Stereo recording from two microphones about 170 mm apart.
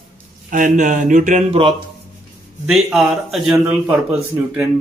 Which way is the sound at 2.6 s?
5° right (ahead or behind).